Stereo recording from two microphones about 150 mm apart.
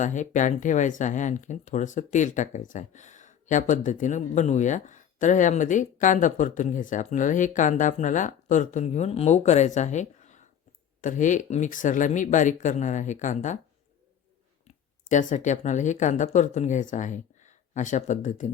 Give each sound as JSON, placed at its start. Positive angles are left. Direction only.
{"t": 0.0, "sound": "speech", "side_deg": 55}
{"t": 15.0, "sound": "speech", "side_deg": 60}